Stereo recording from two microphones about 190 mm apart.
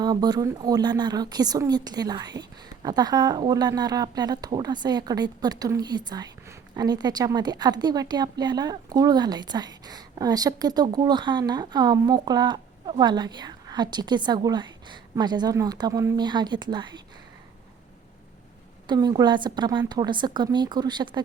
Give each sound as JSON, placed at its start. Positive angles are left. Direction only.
{"t": 0.0, "sound": "a woman's voice", "side_deg": -20}
{"t": 18.9, "sound": "a woman's voice", "side_deg": -20}